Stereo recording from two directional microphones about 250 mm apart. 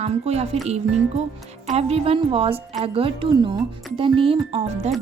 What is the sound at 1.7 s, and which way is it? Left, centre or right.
Speech, right.